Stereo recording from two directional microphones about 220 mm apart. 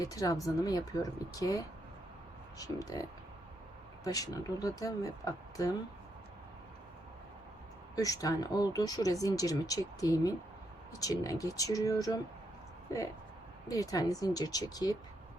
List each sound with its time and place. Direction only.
0.0 s speech: 15° left (ahead or behind)
7.9 s speech: 15° left (ahead or behind)
13.7 s speech: 15° left (ahead or behind)